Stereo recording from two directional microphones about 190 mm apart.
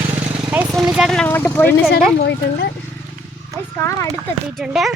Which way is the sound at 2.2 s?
60° left (ahead or behind).